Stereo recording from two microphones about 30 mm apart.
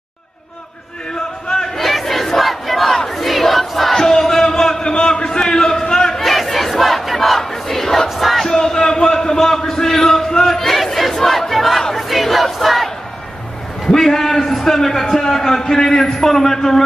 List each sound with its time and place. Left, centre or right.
1.8 s battle cry: centre
3.1 s crowd: centre
3.9 s a sound: centre
6.2 s crowd: centre
8.2 s battle cry: centre
8.5 s a sound: left; by 11.8 s centre
11.9 s battle cry: centre
13.9 s a sound: centre
15.2 s a man's voice: centre